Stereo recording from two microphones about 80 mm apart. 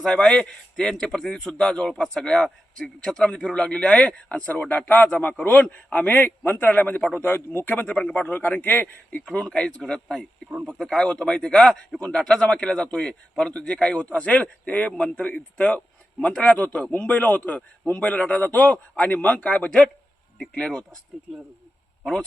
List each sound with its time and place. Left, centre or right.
0.0 s a man's voice: centre
9.5 s a man's voice: centre
11.9 s a man's voice: centre